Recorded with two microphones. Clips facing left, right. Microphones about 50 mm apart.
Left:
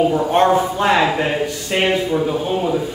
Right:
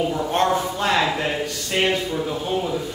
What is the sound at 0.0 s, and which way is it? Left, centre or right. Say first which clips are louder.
Speech: left 6 dB; centre.